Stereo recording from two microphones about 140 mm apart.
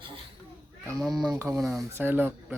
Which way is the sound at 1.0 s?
Centre (ahead or behind).